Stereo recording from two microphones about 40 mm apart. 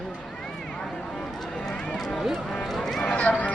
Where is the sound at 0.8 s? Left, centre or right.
Centre.